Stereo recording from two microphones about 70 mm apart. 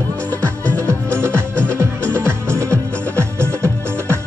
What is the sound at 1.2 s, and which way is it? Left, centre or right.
Music, right.